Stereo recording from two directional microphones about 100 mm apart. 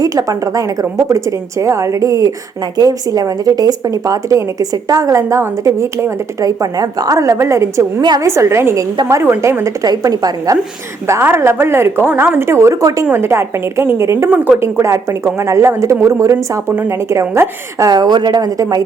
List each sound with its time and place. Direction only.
0.0 s a woman's voice: 35° right (ahead or behind)
9.8 s a woman's voice: 40° right (ahead or behind)
11.1 s speech: 25° right (ahead or behind)
14.3 s a woman's voice: 15° right (ahead or behind)
14.6 s speech: 30° right (ahead or behind)
17.8 s a woman's voice: 45° right (ahead or behind)